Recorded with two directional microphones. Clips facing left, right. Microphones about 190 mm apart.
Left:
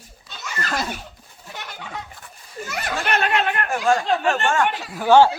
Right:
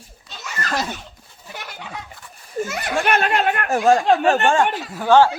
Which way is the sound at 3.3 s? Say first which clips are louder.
Right 3 dB; 35° right (ahead or behind).